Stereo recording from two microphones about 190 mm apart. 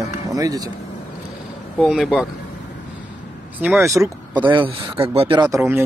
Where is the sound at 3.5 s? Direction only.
10° right (ahead or behind); by 5.4 s 30° right (ahead or behind).